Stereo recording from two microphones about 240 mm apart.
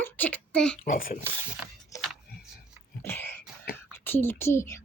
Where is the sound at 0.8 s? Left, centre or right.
Left.